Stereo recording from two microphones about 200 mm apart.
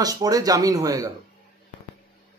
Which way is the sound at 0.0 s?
20° right (ahead or behind).